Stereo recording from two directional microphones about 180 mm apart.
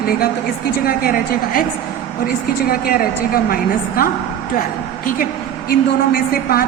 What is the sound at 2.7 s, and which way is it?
A woman's voice, 55° left (ahead or behind).